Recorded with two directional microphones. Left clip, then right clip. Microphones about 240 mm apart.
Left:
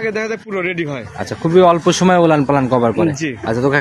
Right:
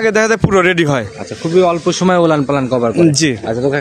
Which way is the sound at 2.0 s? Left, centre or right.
Centre.